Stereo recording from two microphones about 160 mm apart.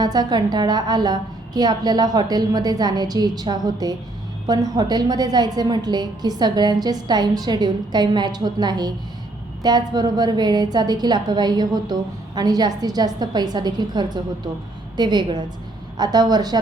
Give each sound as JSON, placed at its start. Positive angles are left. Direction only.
{"t": 0.0, "sound": "a woman's voice", "side_deg": -25}